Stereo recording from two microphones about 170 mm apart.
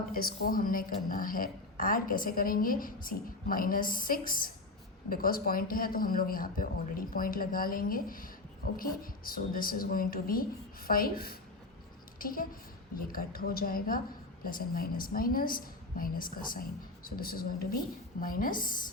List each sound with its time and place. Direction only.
0.1 s a woman's voice: 60° left (ahead or behind)